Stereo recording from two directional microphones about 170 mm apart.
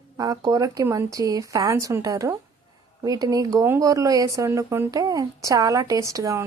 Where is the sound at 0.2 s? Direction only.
20° right (ahead or behind).